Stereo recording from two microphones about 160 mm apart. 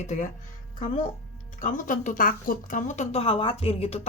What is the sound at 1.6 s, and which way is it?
A woman's voice, 55° left (ahead or behind).